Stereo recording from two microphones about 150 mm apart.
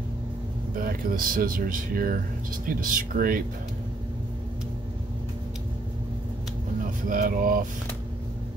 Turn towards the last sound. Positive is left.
turn(degrees=-65)  # may be behind; listen again after turning